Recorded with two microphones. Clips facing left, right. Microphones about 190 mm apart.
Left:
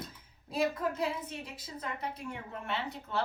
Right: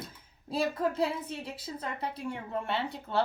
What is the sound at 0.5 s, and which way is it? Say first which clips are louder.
A woman's voice: right 2 dB; 30° right (ahead or behind).